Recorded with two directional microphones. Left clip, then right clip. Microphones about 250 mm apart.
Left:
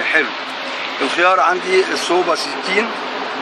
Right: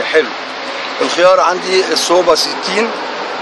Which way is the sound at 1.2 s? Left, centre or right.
Right.